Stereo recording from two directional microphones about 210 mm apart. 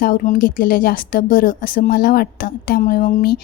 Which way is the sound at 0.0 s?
45° left (ahead or behind).